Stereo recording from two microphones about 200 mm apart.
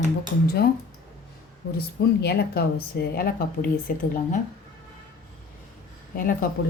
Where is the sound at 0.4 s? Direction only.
50° left (ahead or behind).